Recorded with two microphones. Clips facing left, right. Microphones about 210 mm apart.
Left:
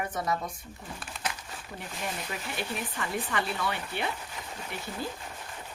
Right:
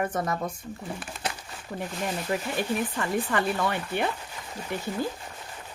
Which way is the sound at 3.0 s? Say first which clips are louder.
Right 2 dB; 50° right (ahead or behind).